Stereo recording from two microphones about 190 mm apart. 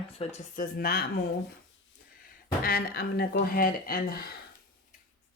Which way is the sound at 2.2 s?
50° left (ahead or behind).